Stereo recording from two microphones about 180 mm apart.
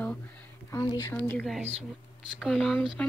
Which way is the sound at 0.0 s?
10° left (ahead or behind).